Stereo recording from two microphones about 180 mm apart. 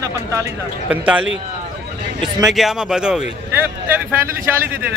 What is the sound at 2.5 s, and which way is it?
Speech, centre (ahead or behind).